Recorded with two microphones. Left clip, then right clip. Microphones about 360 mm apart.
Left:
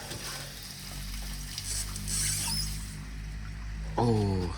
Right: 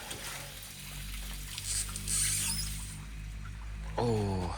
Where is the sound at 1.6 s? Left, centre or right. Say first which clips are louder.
Right 2 dB; centre.